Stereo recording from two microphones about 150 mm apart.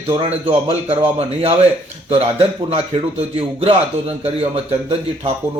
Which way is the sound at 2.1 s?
40° right (ahead or behind).